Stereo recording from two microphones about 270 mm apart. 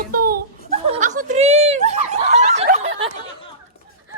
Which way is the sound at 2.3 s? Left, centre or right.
Right.